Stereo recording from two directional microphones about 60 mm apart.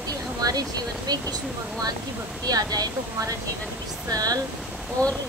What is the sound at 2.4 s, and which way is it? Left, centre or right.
Speech, right.